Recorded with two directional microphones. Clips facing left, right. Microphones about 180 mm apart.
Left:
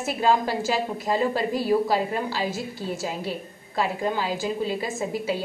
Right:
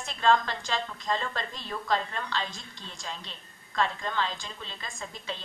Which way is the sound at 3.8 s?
10° left (ahead or behind).